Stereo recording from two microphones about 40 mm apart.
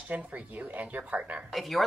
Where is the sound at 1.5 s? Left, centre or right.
Centre.